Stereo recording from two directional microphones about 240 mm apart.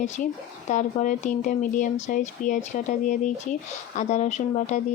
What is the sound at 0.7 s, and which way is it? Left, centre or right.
Speech, left.